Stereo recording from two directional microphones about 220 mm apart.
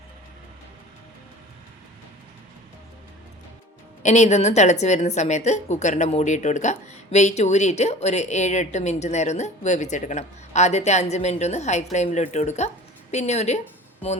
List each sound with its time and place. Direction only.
4.0 s a woman's voice: 30° left (ahead or behind)